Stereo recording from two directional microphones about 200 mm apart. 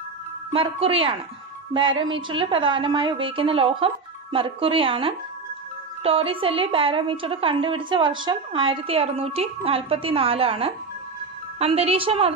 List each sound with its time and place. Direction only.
0.5 s a woman's voice: 30° right (ahead or behind)